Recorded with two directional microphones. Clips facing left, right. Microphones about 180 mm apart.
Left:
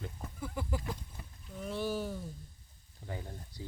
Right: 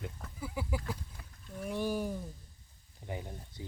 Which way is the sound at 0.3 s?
5° right (ahead or behind).